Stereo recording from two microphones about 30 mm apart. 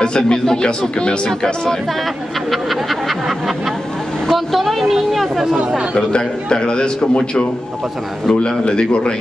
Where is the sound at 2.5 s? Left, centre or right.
Centre.